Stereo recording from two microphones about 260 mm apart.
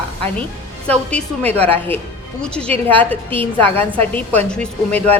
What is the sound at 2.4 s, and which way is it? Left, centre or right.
Speech, centre.